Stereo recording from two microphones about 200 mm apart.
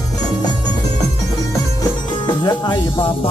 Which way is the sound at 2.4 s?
20° left (ahead or behind).